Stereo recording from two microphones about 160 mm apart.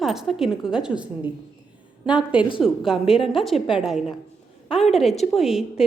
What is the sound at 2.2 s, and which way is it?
A woman's voice, 10° right (ahead or behind).